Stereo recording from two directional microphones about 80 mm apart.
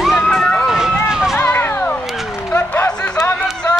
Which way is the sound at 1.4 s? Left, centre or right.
Left.